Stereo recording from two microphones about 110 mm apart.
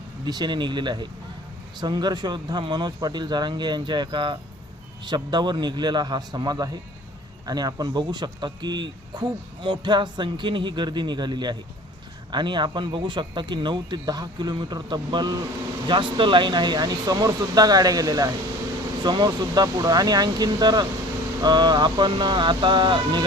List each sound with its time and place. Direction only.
0.3 s speech: 40° right (ahead or behind)